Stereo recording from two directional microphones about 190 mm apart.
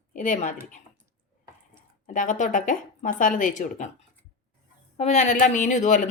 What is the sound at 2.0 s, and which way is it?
Speech, 40° left (ahead or behind).